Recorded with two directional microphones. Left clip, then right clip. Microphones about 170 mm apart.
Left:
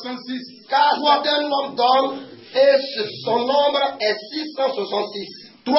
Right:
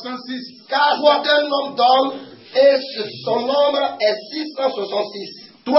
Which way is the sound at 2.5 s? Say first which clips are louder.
Right 1 dB; 20° right (ahead or behind).